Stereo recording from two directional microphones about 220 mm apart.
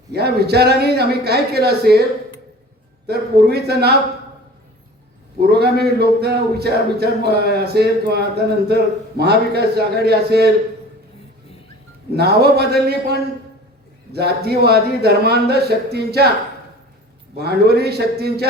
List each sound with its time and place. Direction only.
0.1 s speech: 45° right (ahead or behind)
3.1 s speech: 45° right (ahead or behind)
5.4 s speech: 45° right (ahead or behind)
12.1 s speech: 45° right (ahead or behind)
17.3 s speech: 45° right (ahead or behind)